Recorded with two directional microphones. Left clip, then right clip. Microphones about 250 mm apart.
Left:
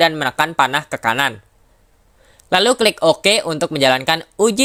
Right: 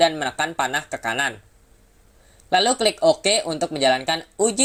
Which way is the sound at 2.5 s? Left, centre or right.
Left.